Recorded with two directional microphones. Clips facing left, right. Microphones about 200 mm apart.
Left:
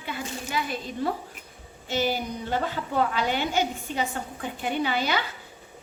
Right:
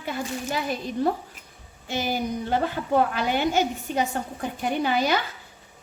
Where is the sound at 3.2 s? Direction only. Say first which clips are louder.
Right 3 dB; 50° right (ahead or behind).